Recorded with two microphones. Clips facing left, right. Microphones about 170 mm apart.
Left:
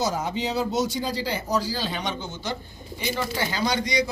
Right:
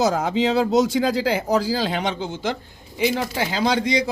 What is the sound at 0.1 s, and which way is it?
Speech, 90° right.